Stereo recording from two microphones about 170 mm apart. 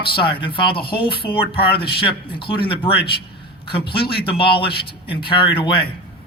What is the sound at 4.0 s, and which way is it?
A man's voice, 30° left (ahead or behind).